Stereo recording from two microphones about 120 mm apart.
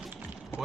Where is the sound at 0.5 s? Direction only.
20° left (ahead or behind).